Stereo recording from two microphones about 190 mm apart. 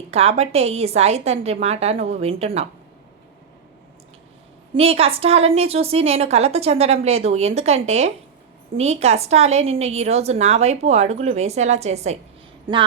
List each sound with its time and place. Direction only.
0.1 s a woman's voice: 30° right (ahead or behind)
4.7 s a woman's voice: 30° right (ahead or behind)
12.7 s a woman's voice: 20° right (ahead or behind)